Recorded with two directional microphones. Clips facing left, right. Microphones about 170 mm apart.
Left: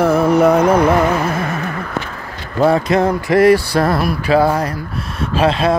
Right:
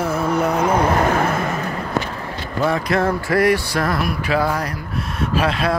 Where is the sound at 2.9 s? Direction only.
20° left (ahead or behind).